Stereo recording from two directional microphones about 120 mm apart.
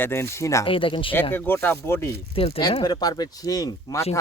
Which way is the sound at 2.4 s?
50° left (ahead or behind).